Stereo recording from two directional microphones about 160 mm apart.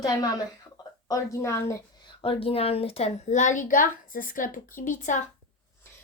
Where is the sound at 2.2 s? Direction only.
35° left (ahead or behind); by 5.2 s 50° left (ahead or behind).